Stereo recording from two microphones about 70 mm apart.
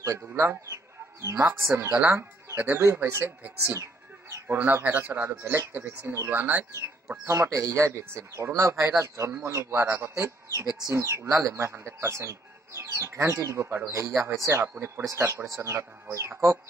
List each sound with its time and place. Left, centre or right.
0.4 s speech: right
2.5 s speech: right
4.5 s speech: right
7.2 s speech: right
14.4 s speech: right